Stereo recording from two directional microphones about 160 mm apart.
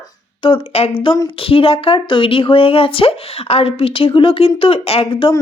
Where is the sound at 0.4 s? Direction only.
35° left (ahead or behind).